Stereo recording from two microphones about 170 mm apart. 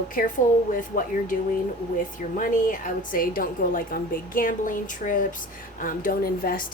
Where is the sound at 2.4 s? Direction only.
50° left (ahead or behind).